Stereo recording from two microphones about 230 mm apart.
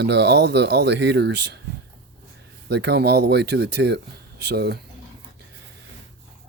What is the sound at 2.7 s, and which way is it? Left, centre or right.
Speech, right.